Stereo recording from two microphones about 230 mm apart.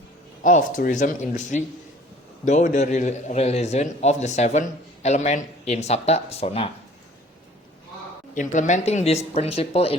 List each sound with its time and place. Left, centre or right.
0.4 s a man's voice: left
8.4 s a man's voice: left